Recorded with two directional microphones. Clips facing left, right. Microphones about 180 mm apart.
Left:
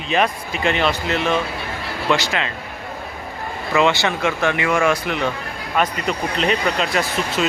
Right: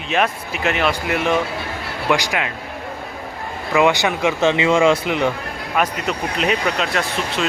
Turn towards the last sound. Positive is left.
turn(degrees=0)  # may be behind; listen again after turning